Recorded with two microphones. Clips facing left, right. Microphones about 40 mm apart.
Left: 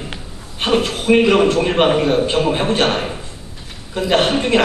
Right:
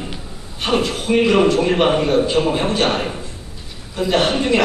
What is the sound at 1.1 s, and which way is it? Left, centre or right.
Speech, left.